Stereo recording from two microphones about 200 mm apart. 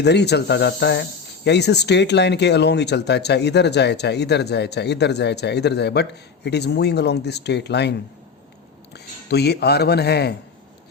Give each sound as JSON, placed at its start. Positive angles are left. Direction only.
{"t": 0.0, "sound": "speech", "side_deg": 55}
{"t": 9.3, "sound": "speech", "side_deg": 55}